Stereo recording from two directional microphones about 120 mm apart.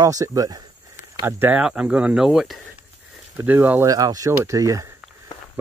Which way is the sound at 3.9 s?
30° right (ahead or behind).